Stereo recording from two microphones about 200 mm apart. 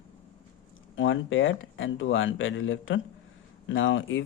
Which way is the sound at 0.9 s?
75° left (ahead or behind).